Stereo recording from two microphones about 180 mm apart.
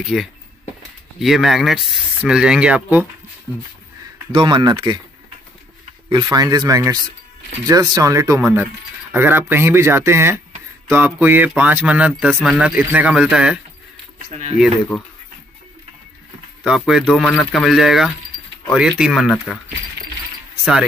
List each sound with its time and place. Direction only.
0.1 s speech: centre (ahead or behind)
4.3 s speech: 25° right (ahead or behind)
6.0 s speech: 20° right (ahead or behind); by 13.6 s 5° right (ahead or behind)
14.9 s speech: 5° left (ahead or behind)
16.6 s speech: 5° right (ahead or behind)